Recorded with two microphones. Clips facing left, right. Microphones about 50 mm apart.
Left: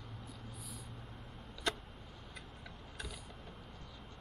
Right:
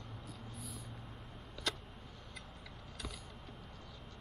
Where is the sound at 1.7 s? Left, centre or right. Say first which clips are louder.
Left 3 dB; left.